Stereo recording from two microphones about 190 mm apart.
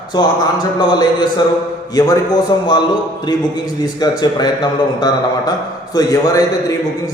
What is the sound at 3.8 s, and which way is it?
A man's voice, 20° left (ahead or behind).